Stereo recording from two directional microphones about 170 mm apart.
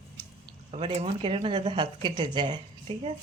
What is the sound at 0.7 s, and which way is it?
Speech, 35° right (ahead or behind).